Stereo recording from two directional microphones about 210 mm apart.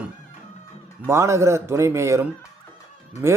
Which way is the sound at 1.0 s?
15° right (ahead or behind).